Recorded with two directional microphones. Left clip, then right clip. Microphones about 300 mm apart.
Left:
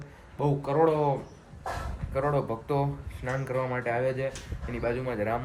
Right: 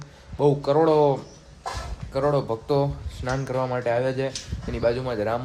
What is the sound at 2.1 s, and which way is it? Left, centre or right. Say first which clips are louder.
Speech: right 5 dB; centre.